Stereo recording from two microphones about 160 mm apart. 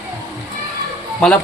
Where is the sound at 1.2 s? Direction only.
5° left (ahead or behind).